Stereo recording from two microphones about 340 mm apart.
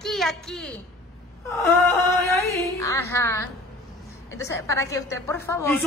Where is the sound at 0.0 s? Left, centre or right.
Centre.